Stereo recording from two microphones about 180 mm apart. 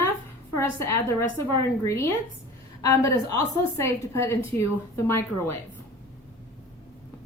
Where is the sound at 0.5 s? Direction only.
15° left (ahead or behind).